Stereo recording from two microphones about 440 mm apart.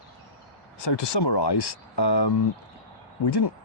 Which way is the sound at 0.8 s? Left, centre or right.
Left.